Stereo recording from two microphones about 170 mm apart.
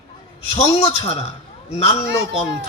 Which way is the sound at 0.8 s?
35° left (ahead or behind).